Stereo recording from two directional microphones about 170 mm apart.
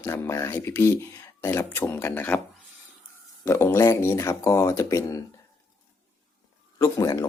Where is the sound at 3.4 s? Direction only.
15° left (ahead or behind).